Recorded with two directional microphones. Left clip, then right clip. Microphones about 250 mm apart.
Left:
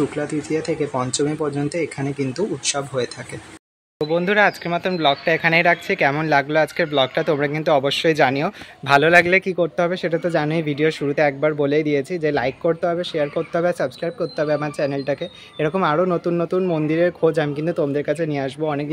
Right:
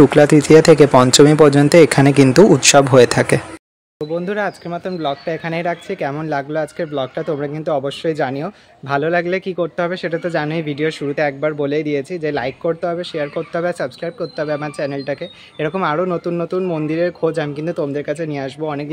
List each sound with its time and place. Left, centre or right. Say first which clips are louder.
0.1 s speech: right 15 dB; right
4.0 s speech: left 4 dB; centre